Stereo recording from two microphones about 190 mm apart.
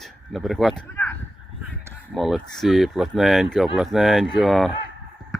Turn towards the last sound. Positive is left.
turn(degrees=0)  # may be behind; listen again after turning